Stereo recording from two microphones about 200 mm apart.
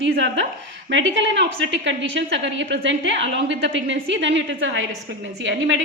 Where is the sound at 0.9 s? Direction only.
65° right (ahead or behind).